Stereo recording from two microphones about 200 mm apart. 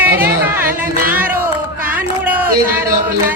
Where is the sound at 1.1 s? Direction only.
10° right (ahead or behind).